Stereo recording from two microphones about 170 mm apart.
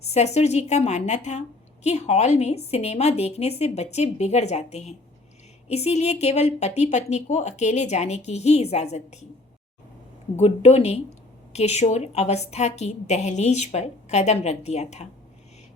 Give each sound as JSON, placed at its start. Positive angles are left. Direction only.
{"t": 0.0, "sound": "a woman's voice", "side_deg": 40}
{"t": 10.3, "sound": "a woman's voice", "side_deg": 40}